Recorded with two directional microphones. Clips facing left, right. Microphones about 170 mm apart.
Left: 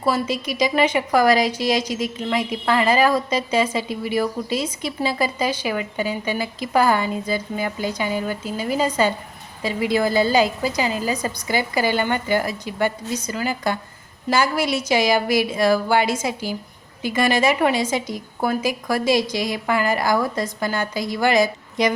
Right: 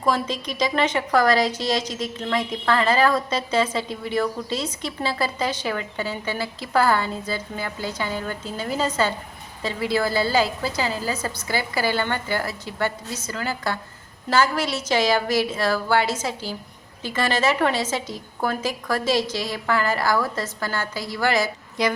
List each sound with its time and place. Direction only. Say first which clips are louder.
0.0 s speech: left 2 dB; 10° left (ahead or behind)